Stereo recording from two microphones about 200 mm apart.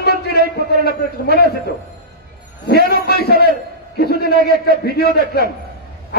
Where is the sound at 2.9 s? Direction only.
50° left (ahead or behind).